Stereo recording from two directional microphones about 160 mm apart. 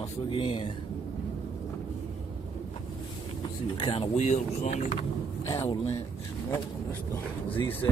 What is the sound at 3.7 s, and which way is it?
Speech, 30° left (ahead or behind).